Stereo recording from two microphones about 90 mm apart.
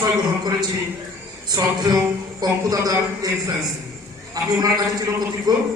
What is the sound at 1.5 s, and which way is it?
A man's voice, 45° right (ahead or behind).